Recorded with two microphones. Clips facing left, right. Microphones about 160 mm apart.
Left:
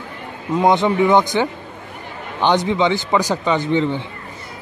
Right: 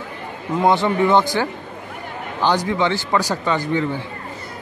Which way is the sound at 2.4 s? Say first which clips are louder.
Left 3 dB; 20° left (ahead or behind).